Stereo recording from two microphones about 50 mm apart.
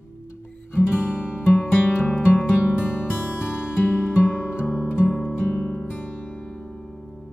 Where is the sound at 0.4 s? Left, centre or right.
Left.